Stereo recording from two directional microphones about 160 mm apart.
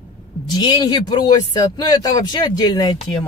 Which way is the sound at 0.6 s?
25° left (ahead or behind).